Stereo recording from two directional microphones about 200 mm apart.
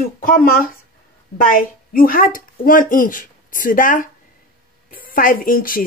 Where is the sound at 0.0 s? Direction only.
45° left (ahead or behind).